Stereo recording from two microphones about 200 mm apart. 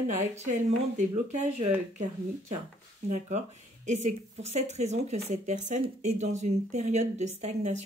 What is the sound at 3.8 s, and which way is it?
Speech, 35° right (ahead or behind).